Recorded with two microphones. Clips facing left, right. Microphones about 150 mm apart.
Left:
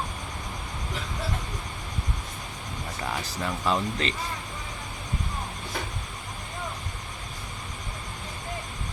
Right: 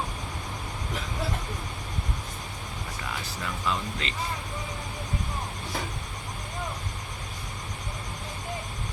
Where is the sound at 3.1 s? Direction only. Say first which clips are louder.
Left 5 dB; 40° left (ahead or behind).